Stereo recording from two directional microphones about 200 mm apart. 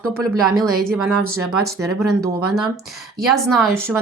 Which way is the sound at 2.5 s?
Centre (ahead or behind).